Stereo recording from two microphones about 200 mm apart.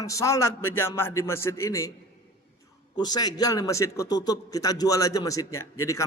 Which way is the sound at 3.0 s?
20° left (ahead or behind).